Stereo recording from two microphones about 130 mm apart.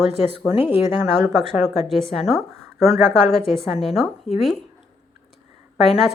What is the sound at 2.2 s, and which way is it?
A woman's voice, centre (ahead or behind).